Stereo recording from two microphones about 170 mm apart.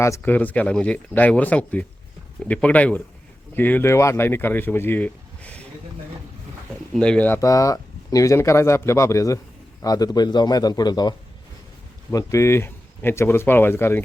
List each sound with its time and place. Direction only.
0.0 s speech: 15° left (ahead or behind)
6.9 s a man's voice: 5° left (ahead or behind); by 11.1 s 25° left (ahead or behind)
12.1 s speech: 15° left (ahead or behind)